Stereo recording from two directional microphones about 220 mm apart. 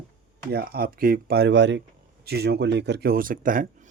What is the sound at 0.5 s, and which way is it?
A man's voice, 45° right (ahead or behind).